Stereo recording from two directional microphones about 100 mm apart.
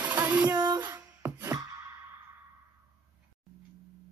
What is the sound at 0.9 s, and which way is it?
Beatboxing, 30° right (ahead or behind).